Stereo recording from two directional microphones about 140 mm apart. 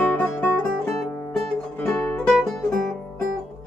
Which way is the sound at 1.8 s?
5° left (ahead or behind).